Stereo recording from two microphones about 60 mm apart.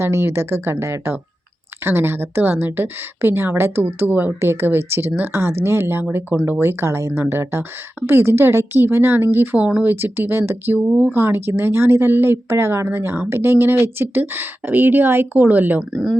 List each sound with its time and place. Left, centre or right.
0.0 s speech: right
3.8 s speech: right
9.6 s speech: right
9.8 s speech: right
10.8 s speech: right
11.1 s speech: right
12.9 s speech: right